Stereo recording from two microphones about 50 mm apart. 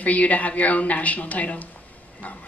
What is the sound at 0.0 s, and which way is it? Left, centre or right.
A man's voice, left.